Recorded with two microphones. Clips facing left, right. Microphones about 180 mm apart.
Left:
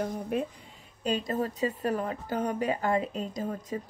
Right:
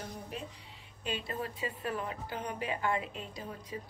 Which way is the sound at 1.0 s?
40° left (ahead or behind).